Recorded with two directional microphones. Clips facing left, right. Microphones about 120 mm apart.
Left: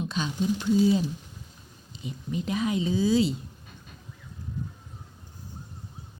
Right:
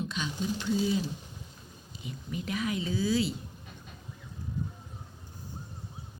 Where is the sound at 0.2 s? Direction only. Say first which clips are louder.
Left 8 dB; 35° left (ahead or behind).